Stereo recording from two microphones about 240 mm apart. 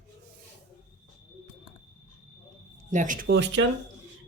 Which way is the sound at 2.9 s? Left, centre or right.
Right.